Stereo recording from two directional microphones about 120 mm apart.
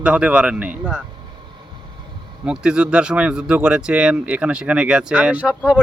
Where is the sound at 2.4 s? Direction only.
5° right (ahead or behind).